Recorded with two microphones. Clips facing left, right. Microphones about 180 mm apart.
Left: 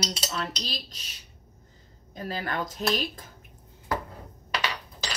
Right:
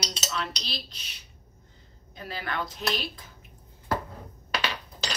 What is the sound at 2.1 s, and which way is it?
Cutlery, 40° left (ahead or behind).